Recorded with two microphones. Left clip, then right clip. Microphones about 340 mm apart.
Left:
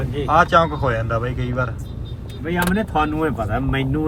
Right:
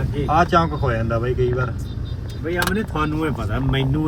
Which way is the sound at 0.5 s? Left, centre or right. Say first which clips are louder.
Left 2 dB; left.